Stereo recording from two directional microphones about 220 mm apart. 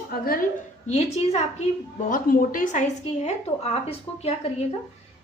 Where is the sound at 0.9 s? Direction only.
30° left (ahead or behind).